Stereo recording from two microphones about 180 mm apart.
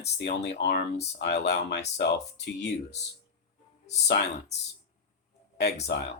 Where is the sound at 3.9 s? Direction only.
70° left (ahead or behind).